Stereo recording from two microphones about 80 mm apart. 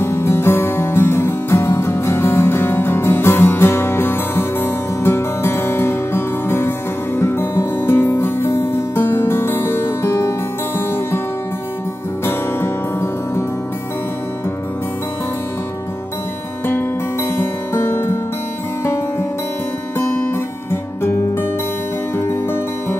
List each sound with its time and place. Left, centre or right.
0.0 s music: left
12.3 s music: left
16.6 s music: left
20.0 s music: left
22.1 s music: left